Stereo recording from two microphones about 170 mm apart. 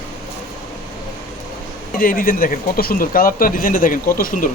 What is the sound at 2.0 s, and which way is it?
Speech, 55° left (ahead or behind).